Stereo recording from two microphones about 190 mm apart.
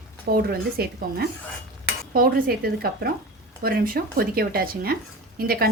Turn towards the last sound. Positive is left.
turn(degrees=-50)  # may be behind; listen again after turning